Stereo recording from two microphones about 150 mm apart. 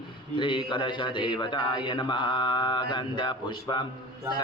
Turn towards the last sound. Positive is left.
turn(degrees=30)  # may be behind; listen again after turning